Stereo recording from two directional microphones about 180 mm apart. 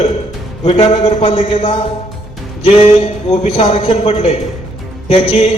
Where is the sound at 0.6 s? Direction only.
35° left (ahead or behind).